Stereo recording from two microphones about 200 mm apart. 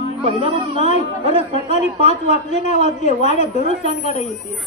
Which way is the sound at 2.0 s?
35° right (ahead or behind).